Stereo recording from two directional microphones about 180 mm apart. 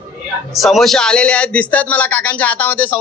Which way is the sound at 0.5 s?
Centre (ahead or behind).